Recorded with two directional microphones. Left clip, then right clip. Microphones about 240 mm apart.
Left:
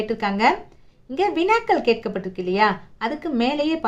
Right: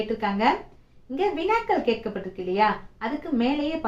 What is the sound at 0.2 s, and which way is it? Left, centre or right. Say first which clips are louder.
Speech: left 4 dB; left.